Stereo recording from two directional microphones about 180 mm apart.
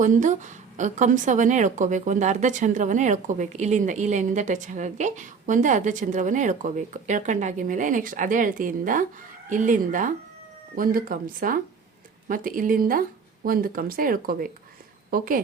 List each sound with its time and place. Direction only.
0.0 s a woman's voice: 45° right (ahead or behind)